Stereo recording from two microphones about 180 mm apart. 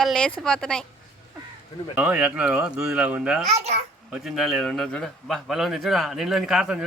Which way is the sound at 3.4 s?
40° right (ahead or behind).